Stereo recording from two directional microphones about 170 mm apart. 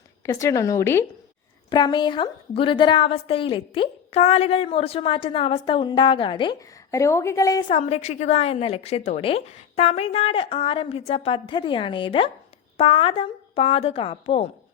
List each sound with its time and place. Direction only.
0.2 s a woman's voice: 15° left (ahead or behind)
7.7 s a woman's voice: 35° left (ahead or behind)